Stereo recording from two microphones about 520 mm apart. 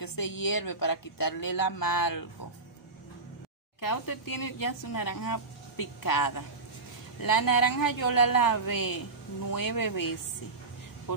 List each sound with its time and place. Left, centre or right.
0.0 s a sound: left
0.4 s speech: left
3.8 s speech: left